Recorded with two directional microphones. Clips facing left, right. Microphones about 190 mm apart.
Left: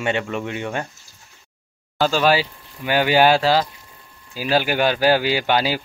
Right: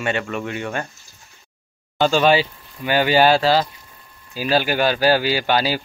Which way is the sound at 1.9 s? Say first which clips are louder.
Right 2 dB; 5° left (ahead or behind).